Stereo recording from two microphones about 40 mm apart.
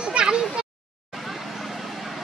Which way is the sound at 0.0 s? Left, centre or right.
Right.